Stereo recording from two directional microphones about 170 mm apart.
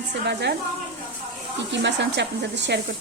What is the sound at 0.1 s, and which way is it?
Speech, 85° right.